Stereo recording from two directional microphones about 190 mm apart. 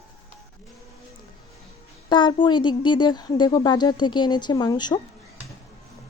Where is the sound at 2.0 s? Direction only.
25° left (ahead or behind).